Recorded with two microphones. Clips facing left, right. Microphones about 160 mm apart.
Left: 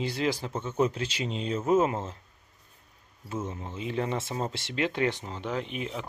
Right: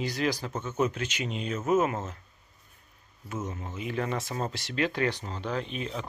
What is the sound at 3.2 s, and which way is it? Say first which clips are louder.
Speech: left 1 dB; 30° left (ahead or behind).